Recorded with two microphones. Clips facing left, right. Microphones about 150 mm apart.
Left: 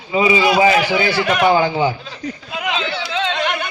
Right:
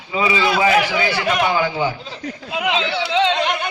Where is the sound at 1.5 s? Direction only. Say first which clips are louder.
Left 4 dB; 30° left (ahead or behind).